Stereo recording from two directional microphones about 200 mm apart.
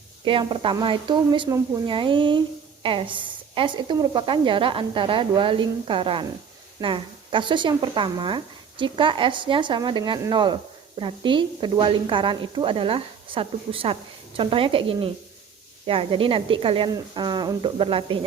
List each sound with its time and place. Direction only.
0.3 s a woman's voice: 25° right (ahead or behind)